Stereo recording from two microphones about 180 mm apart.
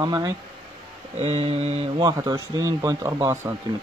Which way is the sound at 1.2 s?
35° right (ahead or behind).